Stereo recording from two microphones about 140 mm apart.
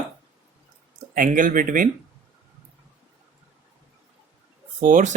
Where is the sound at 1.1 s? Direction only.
70° right (ahead or behind).